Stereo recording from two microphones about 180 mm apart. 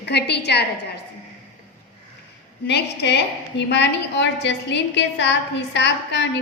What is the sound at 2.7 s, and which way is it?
A woman's voice, 70° left (ahead or behind).